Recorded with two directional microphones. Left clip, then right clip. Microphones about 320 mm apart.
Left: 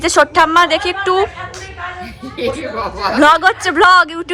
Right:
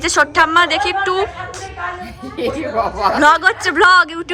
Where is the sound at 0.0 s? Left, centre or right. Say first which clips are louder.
Left 2 dB; centre.